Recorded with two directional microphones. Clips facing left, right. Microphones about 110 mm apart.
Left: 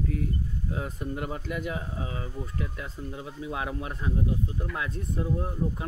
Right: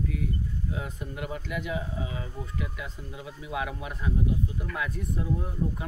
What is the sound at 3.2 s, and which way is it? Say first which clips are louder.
Speech: right 1 dB; 30° left (ahead or behind).